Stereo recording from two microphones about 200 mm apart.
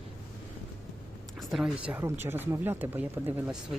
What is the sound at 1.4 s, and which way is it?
Speech, centre (ahead or behind).